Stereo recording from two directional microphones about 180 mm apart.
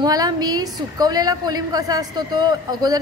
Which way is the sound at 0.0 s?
20° right (ahead or behind).